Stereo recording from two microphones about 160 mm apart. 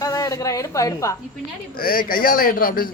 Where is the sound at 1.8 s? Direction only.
65° left (ahead or behind).